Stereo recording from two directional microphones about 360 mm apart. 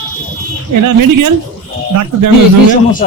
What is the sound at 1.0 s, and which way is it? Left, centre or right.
Speech, right.